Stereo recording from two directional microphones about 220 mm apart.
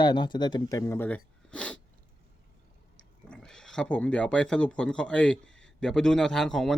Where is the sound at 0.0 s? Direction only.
20° left (ahead or behind); by 1.8 s 5° left (ahead or behind).